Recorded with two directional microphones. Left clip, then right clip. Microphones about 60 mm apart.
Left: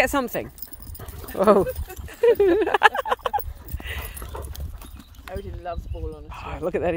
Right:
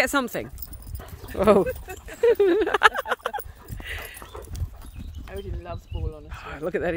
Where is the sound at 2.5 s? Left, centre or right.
Centre.